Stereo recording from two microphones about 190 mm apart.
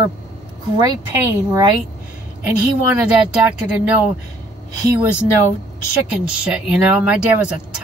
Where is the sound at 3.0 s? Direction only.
5° right (ahead or behind).